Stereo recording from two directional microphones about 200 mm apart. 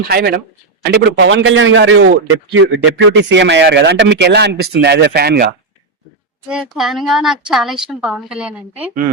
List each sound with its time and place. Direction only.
0.0 s a man's voice: 50° right (ahead or behind)
6.5 s a woman's voice: 5° right (ahead or behind)